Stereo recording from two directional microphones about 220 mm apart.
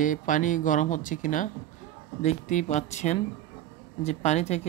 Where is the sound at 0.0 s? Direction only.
35° left (ahead or behind).